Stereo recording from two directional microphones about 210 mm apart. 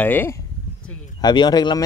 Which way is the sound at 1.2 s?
20° left (ahead or behind).